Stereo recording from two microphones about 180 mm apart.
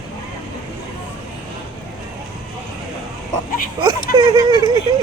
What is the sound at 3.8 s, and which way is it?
Speech, 25° right (ahead or behind).